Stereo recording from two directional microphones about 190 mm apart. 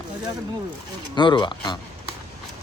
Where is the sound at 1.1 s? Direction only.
25° left (ahead or behind).